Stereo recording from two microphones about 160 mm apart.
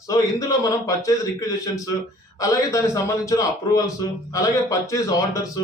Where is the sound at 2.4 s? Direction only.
20° left (ahead or behind).